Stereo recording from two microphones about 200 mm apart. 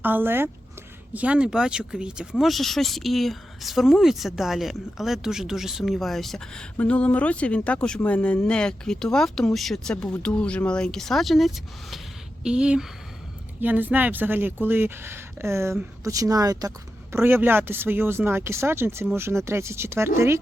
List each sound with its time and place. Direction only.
0.0 s speech: 10° right (ahead or behind)